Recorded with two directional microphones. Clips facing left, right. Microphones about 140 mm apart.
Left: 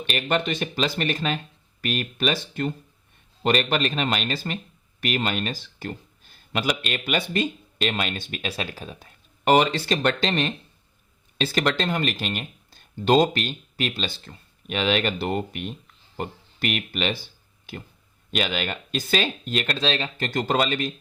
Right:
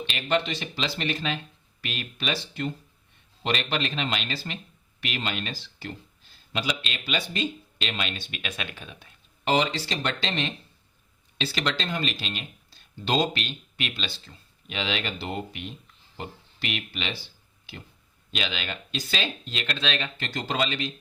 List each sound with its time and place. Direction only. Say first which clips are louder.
0.0 s speech: left 2 dB; 55° left (ahead or behind)
8.4 s speech: left 5 dB; 35° left (ahead or behind)
18.3 s speech: left 6 dB; 50° left (ahead or behind)